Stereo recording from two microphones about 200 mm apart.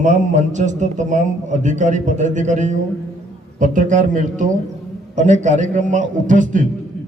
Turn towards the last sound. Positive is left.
turn(degrees=-40)  # may be behind; listen again after turning